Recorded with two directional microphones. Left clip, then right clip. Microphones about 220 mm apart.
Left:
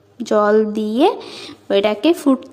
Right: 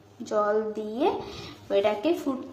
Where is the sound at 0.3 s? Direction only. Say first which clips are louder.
Left 11 dB; 45° left (ahead or behind).